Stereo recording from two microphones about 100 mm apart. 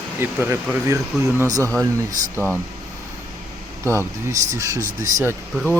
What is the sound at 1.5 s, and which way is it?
Speech, 35° right (ahead or behind).